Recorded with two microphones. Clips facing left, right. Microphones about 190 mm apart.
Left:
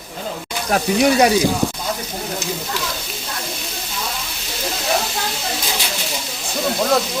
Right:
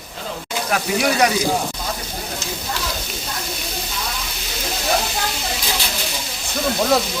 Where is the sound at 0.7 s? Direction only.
30° left (ahead or behind).